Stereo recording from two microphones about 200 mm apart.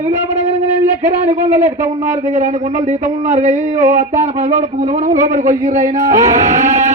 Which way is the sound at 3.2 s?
35° right (ahead or behind).